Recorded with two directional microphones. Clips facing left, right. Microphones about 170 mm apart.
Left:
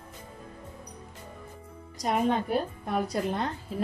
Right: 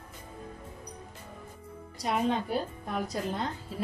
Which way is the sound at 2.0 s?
50° left (ahead or behind).